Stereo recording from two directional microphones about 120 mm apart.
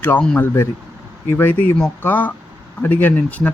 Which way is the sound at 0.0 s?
15° left (ahead or behind).